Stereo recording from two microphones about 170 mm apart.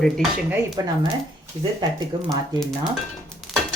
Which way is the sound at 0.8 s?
20° right (ahead or behind).